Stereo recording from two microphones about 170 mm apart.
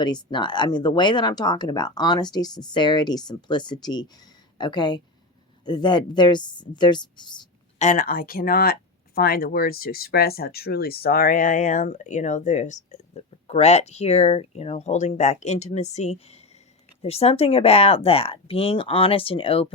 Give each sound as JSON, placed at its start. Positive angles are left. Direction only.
{"t": 0.0, "sound": "speech", "side_deg": 25}
{"t": 7.8, "sound": "speech", "side_deg": 50}